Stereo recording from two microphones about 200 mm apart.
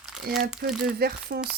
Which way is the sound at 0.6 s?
50° right (ahead or behind).